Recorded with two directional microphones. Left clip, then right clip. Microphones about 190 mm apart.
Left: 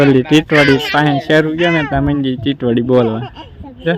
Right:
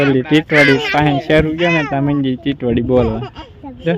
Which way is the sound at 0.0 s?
20° left (ahead or behind).